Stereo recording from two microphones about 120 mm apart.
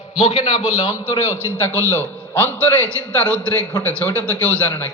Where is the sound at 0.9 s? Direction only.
15° left (ahead or behind).